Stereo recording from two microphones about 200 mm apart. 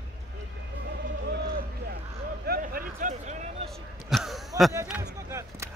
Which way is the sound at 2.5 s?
45° right (ahead or behind).